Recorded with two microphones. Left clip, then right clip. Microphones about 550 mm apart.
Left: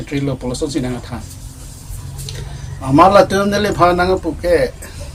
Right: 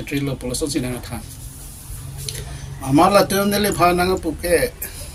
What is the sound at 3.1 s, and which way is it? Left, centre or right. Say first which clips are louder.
Speech: left 5 dB; right.